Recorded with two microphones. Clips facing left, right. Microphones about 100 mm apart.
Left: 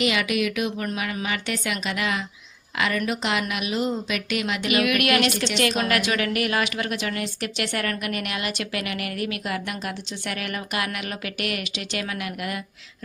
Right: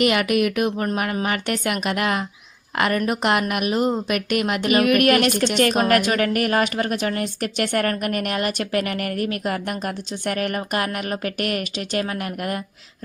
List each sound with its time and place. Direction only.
0.0 s a woman's voice: 50° right (ahead or behind)